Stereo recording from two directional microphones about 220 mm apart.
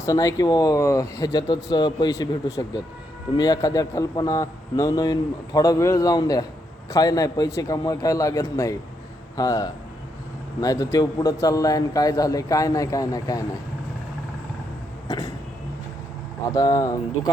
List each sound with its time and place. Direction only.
0.0 s a man's voice: 15° left (ahead or behind)
15.0 s a sound: 15° left (ahead or behind)
16.5 s a man's voice: 15° left (ahead or behind)